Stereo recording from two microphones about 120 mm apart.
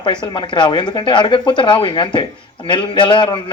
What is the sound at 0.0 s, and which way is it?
A man's voice, 40° left (ahead or behind).